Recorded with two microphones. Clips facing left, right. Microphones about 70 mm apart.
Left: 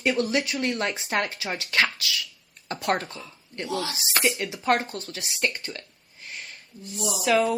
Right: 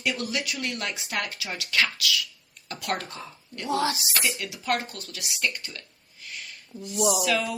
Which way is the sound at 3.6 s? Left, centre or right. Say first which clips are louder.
Right 4 dB; right.